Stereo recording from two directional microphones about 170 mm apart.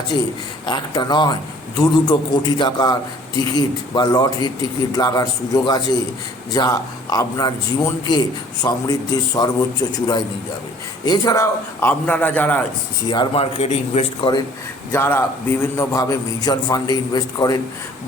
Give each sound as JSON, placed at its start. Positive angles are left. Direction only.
{"t": 0.6, "sound": "a man's voice", "side_deg": 25}
{"t": 13.1, "sound": "speech", "side_deg": 30}
{"t": 14.9, "sound": "a man's voice", "side_deg": 15}